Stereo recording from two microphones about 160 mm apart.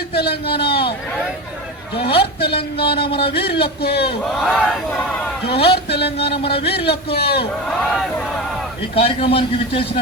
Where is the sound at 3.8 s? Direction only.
80° left.